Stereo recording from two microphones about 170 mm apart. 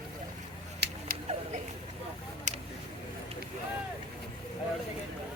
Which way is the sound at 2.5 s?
45° right (ahead or behind).